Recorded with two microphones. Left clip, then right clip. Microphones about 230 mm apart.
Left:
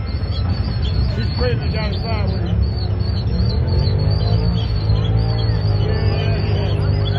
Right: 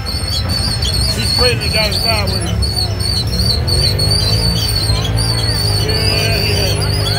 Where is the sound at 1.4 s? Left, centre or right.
Right.